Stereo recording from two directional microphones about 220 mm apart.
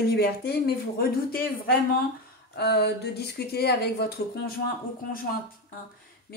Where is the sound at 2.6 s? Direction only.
45° left (ahead or behind).